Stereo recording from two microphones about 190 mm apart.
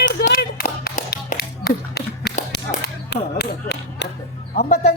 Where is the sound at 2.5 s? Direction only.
60° left (ahead or behind).